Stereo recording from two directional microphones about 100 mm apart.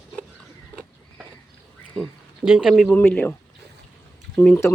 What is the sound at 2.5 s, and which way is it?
Speech, 5° right (ahead or behind).